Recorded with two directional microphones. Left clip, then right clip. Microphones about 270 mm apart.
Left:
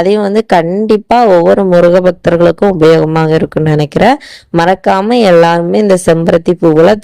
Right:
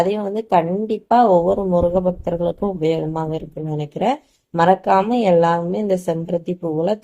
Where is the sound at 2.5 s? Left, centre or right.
Left.